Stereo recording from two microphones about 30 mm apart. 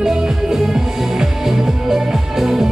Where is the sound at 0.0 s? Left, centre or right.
Centre.